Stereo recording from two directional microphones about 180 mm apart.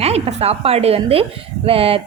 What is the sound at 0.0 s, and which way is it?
Speech, 35° right (ahead or behind).